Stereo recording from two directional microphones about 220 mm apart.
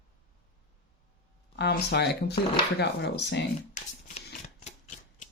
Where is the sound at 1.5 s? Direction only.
50° left (ahead or behind).